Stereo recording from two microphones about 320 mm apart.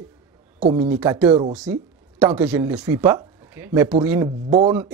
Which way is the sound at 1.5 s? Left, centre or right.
Centre.